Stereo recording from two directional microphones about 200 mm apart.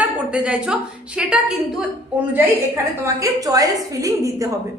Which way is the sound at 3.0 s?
15° right (ahead or behind).